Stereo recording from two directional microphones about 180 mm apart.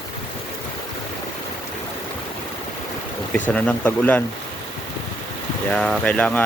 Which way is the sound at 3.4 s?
5° left (ahead or behind).